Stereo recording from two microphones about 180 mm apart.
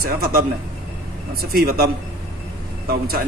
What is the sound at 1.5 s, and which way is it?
Speech, 60° right (ahead or behind).